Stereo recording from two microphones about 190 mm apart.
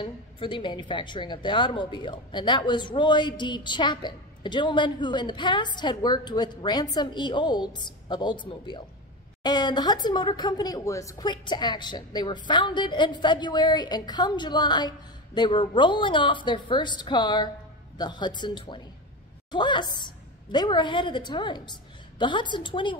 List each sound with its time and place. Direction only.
0.0 s a woman's voice: 25° left (ahead or behind)